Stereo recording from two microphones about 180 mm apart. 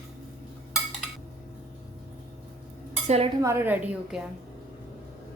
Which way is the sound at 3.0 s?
35° right (ahead or behind).